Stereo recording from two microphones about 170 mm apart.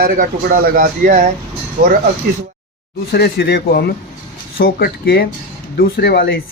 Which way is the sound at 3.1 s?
70° left (ahead or behind).